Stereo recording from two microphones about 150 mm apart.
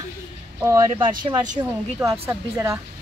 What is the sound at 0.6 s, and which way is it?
Speech, 20° right (ahead or behind).